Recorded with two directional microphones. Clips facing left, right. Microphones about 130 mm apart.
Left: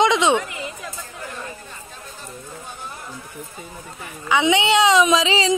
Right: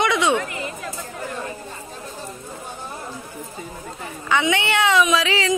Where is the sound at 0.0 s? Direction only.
20° left (ahead or behind).